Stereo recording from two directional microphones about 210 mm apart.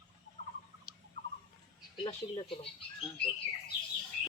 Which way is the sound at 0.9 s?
5° right (ahead or behind).